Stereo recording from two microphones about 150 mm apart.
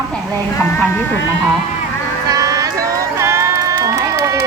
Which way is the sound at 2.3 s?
20° right (ahead or behind).